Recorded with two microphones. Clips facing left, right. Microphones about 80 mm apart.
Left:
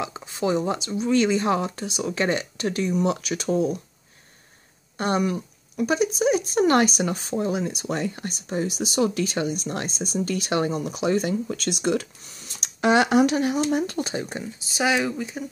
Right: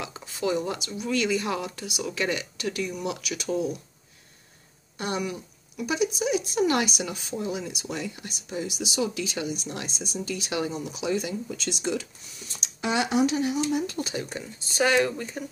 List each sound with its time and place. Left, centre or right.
0.0 s speech: left
4.9 s speech: left
13.9 s speech: left
14.4 s speech: centre